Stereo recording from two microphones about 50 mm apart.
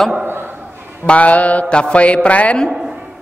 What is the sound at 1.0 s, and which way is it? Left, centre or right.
A man's voice, left.